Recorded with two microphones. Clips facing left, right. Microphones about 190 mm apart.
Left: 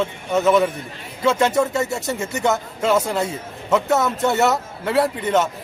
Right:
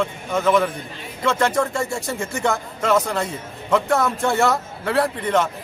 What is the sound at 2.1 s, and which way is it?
A man's voice, 5° left (ahead or behind).